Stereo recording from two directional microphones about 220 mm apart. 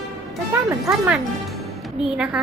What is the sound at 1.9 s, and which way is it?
Speech, 5° right (ahead or behind).